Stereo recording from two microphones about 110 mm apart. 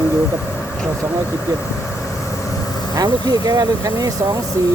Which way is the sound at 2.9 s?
35° right (ahead or behind).